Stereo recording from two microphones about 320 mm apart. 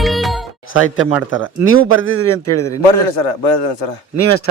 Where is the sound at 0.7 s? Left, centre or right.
Left.